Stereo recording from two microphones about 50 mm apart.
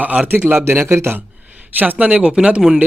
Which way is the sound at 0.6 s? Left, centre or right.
Right.